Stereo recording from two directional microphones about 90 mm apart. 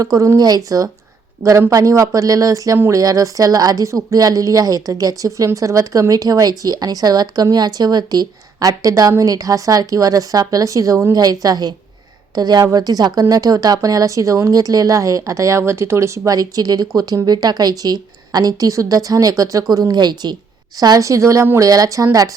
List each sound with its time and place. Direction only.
0.0 s speech: 40° right (ahead or behind)
1.4 s speech: 35° right (ahead or behind)
11.2 s a woman's voice: 45° right (ahead or behind)